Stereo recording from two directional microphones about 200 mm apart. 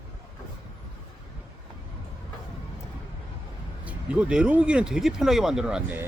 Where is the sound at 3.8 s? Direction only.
5° right (ahead or behind).